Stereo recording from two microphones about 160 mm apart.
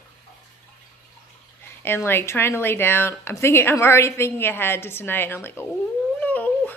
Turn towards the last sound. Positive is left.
turn(degrees=10)  # may be behind; listen again after turning